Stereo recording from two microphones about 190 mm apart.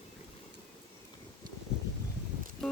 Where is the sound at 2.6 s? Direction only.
Centre (ahead or behind).